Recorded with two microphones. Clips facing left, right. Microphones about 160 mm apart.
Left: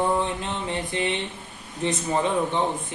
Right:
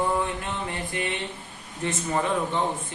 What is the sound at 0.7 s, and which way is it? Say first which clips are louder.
A woman's voice: left 4 dB; 20° left (ahead or behind).